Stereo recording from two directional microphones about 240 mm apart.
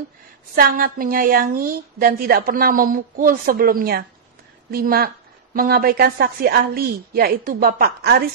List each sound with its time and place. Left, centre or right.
0.6 s speech: right